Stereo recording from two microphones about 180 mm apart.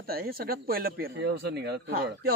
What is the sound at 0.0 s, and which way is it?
Speech, 55° right (ahead or behind).